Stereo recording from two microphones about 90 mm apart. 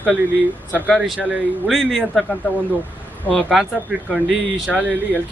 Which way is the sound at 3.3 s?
15° left (ahead or behind).